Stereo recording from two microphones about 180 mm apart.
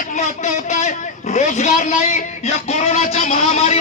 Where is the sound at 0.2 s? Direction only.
40° left (ahead or behind).